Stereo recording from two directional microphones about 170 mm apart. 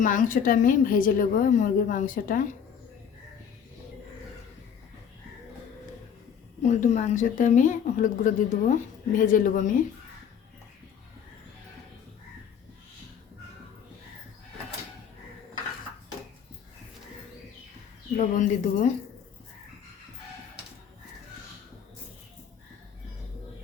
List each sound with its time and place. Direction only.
0.0 s a woman's voice: 50° left (ahead or behind)
6.6 s a woman's voice: 45° left (ahead or behind)
18.2 s a woman's voice: 45° left (ahead or behind)